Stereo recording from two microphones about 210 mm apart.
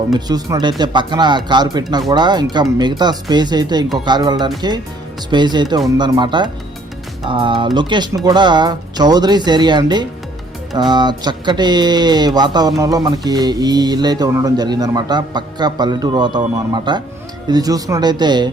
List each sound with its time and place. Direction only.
0.1 s speech: 20° right (ahead or behind)